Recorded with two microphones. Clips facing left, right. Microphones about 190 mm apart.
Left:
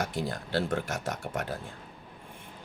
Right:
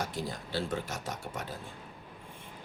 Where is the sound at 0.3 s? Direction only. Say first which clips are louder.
Left 4 dB; 70° left (ahead or behind).